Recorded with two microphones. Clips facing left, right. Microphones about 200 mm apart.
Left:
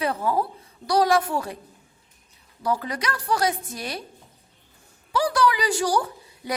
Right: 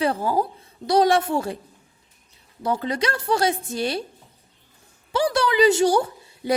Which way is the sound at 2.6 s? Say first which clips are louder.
Right 3 dB; 25° right (ahead or behind).